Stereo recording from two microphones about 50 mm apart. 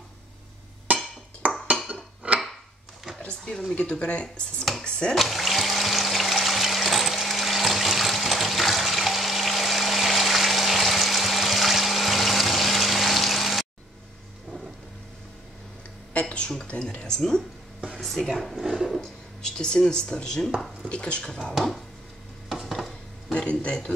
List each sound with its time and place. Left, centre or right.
1.4 s dishes: right
1.9 s a sound: right
3.7 s speech: centre
4.8 s a sound: centre
5.1 s water: centre
16.1 s speech: left
17.1 s speech: centre
19.4 s speech: centre
21.2 s speech: centre
22.5 s dishes: centre
23.3 s speech: left